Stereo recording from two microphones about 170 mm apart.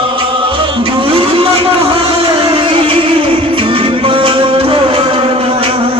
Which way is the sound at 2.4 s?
30° right (ahead or behind).